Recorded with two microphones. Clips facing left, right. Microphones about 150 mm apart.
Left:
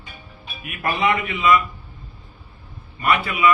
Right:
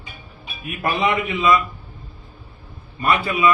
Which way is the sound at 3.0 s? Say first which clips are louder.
Right 1 dB; 30° right (ahead or behind).